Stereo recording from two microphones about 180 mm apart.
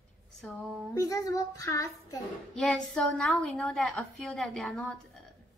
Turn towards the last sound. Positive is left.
turn(degrees=0)  # may be behind; listen again after turning